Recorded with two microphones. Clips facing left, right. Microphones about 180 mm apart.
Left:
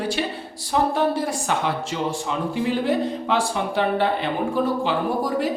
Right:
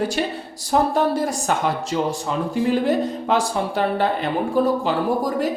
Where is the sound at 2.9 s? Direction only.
45° right (ahead or behind).